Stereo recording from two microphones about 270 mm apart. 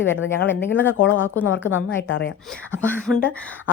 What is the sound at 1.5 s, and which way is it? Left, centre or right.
Speech, left.